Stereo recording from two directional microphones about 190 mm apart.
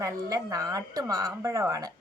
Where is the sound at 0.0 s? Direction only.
15° right (ahead or behind).